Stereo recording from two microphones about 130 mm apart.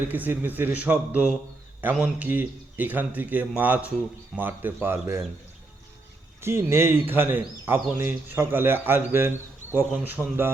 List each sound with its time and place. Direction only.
0.1 s speech: 15° right (ahead or behind)
6.4 s speech: 20° right (ahead or behind)